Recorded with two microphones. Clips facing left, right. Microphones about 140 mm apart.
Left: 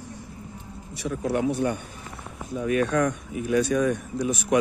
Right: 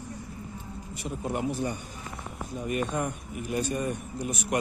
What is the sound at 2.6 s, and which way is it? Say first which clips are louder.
Speech: left 7 dB; 85° left.